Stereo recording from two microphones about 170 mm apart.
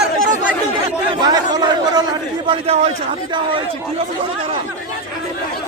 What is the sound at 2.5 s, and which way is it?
Speech, 35° right (ahead or behind).